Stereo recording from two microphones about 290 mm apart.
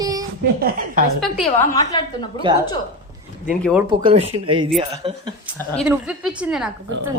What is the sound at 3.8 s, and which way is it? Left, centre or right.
A woman's voice, centre.